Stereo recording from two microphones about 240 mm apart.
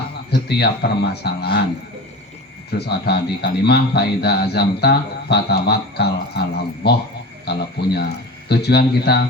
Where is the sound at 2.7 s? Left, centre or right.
Left.